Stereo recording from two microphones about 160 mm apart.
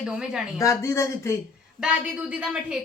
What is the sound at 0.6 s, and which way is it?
Speech, 20° left (ahead or behind).